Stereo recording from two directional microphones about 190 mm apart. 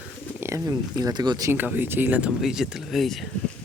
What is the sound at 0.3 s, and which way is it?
Speech, 15° right (ahead or behind).